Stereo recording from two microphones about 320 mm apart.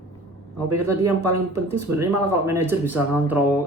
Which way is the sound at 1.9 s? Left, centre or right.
Right.